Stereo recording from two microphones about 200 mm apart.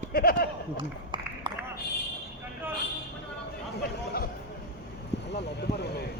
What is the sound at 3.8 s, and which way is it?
Chatter, 50° left (ahead or behind).